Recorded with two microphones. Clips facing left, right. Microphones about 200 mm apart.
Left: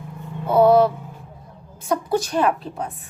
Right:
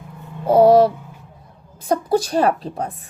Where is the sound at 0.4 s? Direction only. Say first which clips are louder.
Right 3 dB; 35° right (ahead or behind).